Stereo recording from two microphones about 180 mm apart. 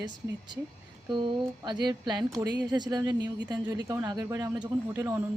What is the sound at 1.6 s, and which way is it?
Speech, 25° right (ahead or behind).